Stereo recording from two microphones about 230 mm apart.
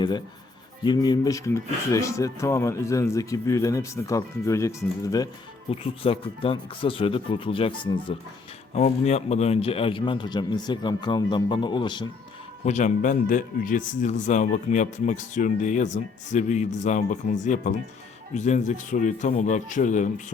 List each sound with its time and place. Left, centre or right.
0.9 s speech: centre
5.8 s a man's voice: left
12.6 s speech: left